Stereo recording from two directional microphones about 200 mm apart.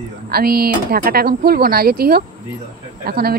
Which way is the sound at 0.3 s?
50° right (ahead or behind).